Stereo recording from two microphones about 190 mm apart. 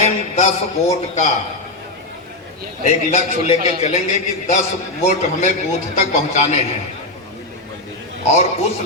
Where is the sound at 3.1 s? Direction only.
35° left (ahead or behind).